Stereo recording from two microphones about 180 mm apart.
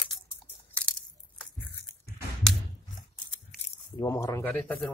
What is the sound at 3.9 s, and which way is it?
Speech, 15° left (ahead or behind).